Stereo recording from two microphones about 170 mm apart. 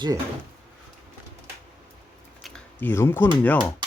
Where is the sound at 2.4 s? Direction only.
5° left (ahead or behind).